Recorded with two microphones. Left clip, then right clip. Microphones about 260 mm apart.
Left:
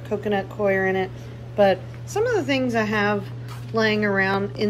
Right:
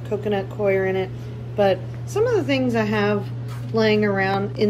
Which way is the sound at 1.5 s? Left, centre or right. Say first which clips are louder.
Left 1 dB; left.